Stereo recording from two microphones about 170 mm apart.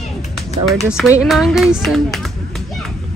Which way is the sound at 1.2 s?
Centre (ahead or behind).